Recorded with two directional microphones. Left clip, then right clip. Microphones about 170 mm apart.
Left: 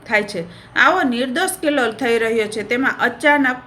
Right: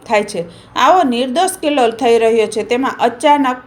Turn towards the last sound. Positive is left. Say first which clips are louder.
# right 3 dB
turn(degrees=-15)  # may be behind; listen again after turning